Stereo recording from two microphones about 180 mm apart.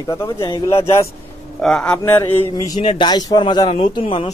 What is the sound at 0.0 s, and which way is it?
Speech, 20° left (ahead or behind).